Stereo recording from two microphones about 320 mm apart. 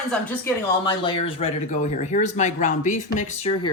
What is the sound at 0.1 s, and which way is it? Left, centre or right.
Speech, centre.